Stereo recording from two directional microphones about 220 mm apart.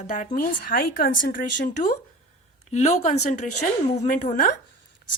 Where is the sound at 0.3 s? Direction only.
40° left (ahead or behind).